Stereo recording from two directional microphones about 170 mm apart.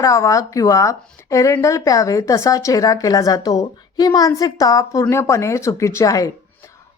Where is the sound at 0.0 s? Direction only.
20° left (ahead or behind).